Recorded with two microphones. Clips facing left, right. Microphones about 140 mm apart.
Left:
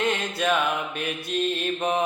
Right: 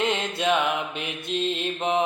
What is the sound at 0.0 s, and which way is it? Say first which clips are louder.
Mantra: even; 20° right (ahead or behind).